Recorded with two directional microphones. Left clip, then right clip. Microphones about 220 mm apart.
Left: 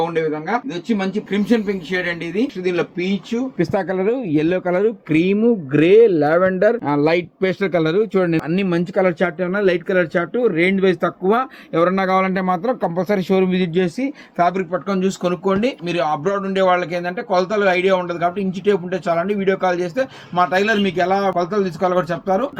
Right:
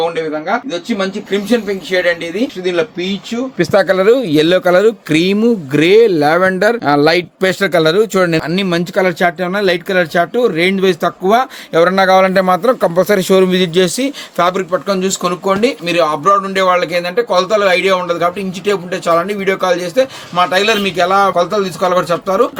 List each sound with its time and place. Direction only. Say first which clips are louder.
0.1 s speech: right 3 dB; 15° right (ahead or behind)
3.7 s speech: right 12 dB; 45° right (ahead or behind)
14.3 s speech: right 4 dB; 25° right (ahead or behind)